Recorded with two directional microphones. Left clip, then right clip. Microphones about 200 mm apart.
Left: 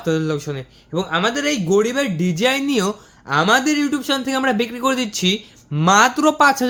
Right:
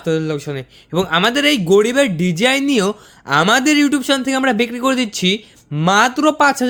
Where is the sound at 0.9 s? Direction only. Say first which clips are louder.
Right 4 dB; 45° right (ahead or behind); by 3.3 s 30° right (ahead or behind).